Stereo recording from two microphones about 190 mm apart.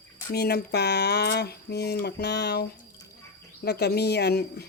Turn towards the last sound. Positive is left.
turn(degrees=60)  # may be behind; listen again after turning